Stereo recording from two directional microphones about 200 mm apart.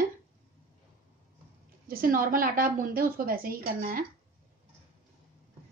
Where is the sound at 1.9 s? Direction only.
45° right (ahead or behind).